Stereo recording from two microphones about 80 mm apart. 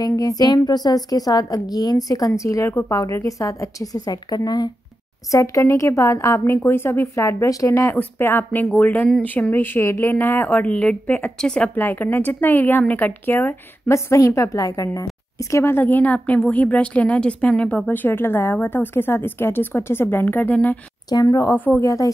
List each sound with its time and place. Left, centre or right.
0.1 s a woman's voice: left
5.3 s a woman's voice: left
13.8 s a woman's voice: left
15.5 s a woman's voice: left
21.1 s a woman's voice: left
21.5 s a woman's voice: left
21.8 s a woman's voice: left